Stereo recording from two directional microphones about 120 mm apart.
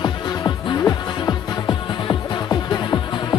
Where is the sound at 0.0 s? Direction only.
30° left (ahead or behind).